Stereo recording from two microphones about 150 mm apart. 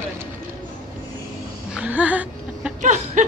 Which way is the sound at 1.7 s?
10° right (ahead or behind).